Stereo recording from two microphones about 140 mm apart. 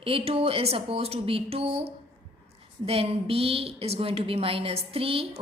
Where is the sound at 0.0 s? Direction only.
40° right (ahead or behind).